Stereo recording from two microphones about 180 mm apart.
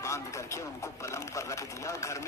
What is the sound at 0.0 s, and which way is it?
A man's voice, 15° left (ahead or behind).